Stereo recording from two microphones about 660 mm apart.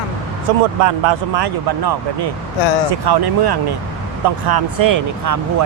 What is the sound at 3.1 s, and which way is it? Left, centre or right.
Speech, right.